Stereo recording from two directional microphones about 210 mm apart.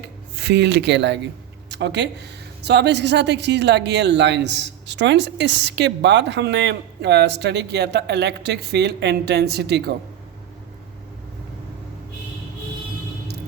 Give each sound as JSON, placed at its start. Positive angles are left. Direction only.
{"t": 0.3, "sound": "a woman's voice", "side_deg": -55}